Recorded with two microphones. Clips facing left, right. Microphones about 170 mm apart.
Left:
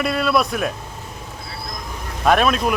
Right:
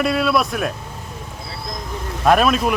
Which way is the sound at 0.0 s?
Centre (ahead or behind).